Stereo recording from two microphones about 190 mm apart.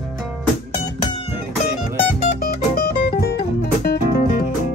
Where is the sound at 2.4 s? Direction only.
55° left (ahead or behind).